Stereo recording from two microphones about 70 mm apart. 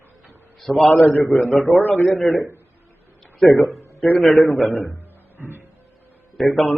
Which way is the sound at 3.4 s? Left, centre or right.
Centre.